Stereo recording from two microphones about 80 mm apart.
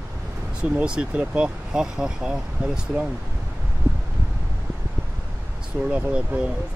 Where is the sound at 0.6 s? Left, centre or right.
Centre.